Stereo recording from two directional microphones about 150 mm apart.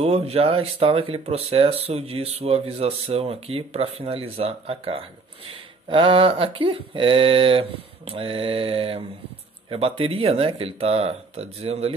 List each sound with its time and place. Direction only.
0.0 s speech: 40° right (ahead or behind)